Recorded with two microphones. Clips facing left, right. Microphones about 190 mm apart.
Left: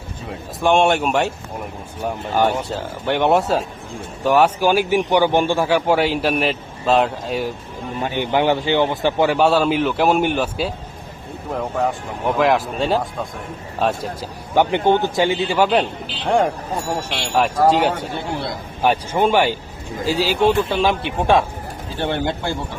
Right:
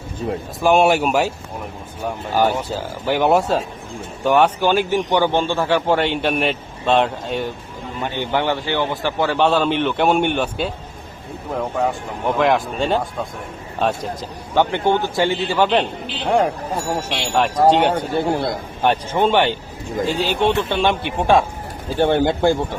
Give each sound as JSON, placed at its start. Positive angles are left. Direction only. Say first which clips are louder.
{"t": 0.6, "sound": "speech", "louder": "right 1 dB", "side_deg": -5}
{"t": 2.3, "sound": "a man's voice", "louder": "right 1 dB", "side_deg": 0}
{"t": 8.0, "sound": "a man's voice", "louder": "left 3 dB", "side_deg": 15}
{"t": 18.8, "sound": "a man's voice", "louder": "even", "side_deg": 10}
{"t": 21.9, "sound": "speech", "louder": "right 6 dB", "side_deg": -45}